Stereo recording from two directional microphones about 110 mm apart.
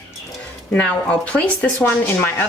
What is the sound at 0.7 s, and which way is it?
Speech, 10° left (ahead or behind).